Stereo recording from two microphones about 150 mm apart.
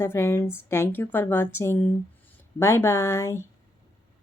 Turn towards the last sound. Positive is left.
turn(degrees=15)  # may be behind; listen again after turning